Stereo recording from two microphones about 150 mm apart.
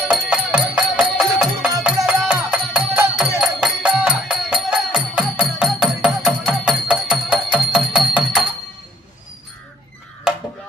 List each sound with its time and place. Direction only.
0.1 s music: 5° right (ahead or behind)